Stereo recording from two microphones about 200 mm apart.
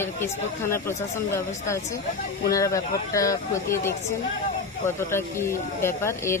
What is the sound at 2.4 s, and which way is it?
Speech, 15° left (ahead or behind).